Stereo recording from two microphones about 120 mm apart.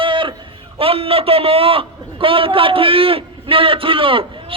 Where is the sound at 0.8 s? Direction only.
50° right (ahead or behind).